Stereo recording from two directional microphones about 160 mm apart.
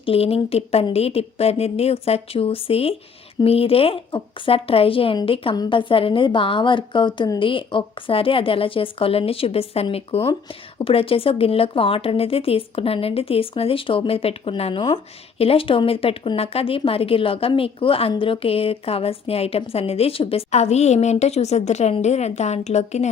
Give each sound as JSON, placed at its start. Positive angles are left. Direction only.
{"t": 0.0, "sound": "a woman's voice", "side_deg": 35}